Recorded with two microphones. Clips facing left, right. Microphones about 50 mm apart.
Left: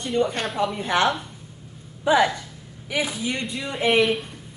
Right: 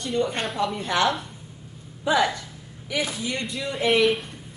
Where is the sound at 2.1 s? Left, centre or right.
Left.